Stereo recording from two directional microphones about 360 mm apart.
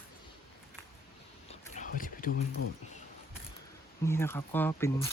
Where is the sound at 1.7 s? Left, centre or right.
Left.